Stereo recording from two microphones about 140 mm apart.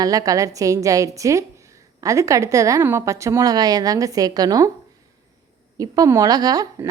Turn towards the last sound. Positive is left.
turn(degrees=-25)  # may be behind; listen again after turning